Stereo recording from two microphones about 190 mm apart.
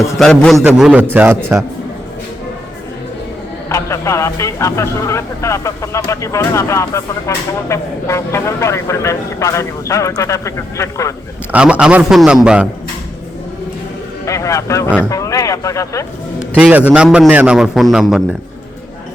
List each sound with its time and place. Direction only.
0.2 s a man's voice: 5° left (ahead or behind)
3.7 s speech: 15° left (ahead or behind)
11.5 s a man's voice: 5° right (ahead or behind)
14.3 s speech: 15° left (ahead or behind)
16.6 s a man's voice: 10° right (ahead or behind)